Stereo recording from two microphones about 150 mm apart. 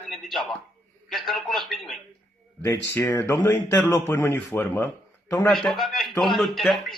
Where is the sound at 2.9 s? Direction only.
15° left (ahead or behind).